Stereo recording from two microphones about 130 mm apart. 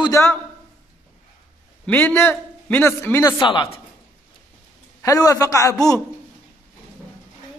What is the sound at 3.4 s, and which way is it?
Speech, 40° left (ahead or behind).